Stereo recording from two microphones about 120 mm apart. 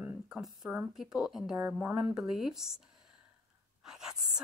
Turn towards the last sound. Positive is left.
turn(degrees=-5)  # may be behind; listen again after turning